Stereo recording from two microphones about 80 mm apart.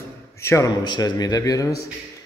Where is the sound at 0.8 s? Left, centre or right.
Left.